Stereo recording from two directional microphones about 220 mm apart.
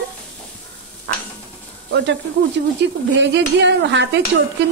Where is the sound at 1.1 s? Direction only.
50° right (ahead or behind).